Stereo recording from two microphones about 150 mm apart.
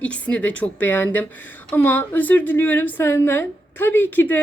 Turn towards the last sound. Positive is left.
turn(degrees=10)  # may be behind; listen again after turning